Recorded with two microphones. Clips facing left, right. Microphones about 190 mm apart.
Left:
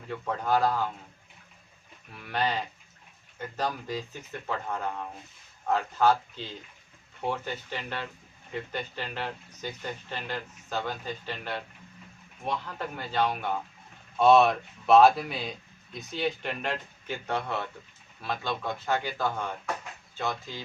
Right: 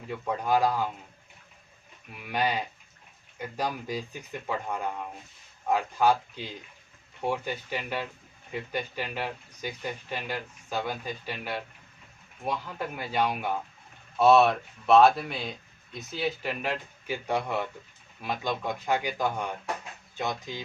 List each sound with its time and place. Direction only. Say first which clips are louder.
0.1 s speech: right 1 dB; 10° right (ahead or behind)
2.1 s speech: right 1 dB; 10° right (ahead or behind)